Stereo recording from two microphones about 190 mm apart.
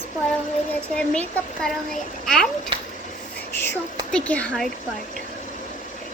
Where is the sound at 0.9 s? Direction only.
5° left (ahead or behind).